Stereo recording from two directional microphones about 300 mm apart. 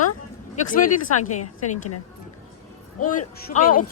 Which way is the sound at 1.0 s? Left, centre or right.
Left.